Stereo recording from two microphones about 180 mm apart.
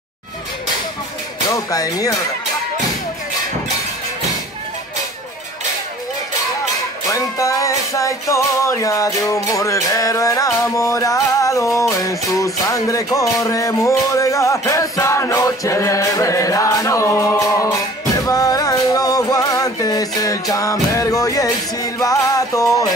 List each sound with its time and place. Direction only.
1.5 s speech: 20° left (ahead or behind)
7.1 s music: 20° left (ahead or behind)